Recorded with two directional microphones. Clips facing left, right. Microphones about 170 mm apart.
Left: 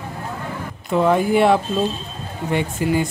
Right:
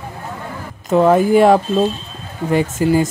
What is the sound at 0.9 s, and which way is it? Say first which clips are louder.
Speech: right 5 dB; 40° right (ahead or behind).